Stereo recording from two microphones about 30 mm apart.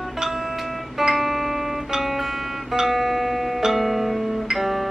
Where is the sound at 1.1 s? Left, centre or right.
Centre.